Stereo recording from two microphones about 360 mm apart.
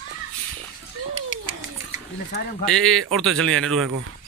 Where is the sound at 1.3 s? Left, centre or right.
Left.